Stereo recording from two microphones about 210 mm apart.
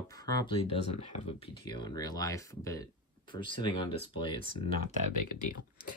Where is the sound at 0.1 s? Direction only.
15° left (ahead or behind).